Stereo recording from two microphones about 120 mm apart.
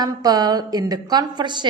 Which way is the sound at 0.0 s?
30° right (ahead or behind).